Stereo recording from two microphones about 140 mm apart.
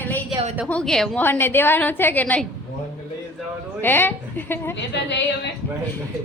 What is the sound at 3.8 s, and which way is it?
Speech, 15° left (ahead or behind).